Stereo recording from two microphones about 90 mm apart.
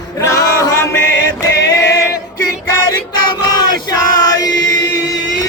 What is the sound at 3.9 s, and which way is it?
Male singing, 40° left (ahead or behind).